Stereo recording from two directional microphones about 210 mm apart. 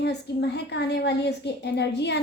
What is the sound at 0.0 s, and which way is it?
A woman's voice, 50° left (ahead or behind).